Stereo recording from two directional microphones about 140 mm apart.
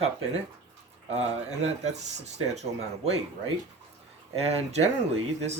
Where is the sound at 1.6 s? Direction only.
50° right (ahead or behind).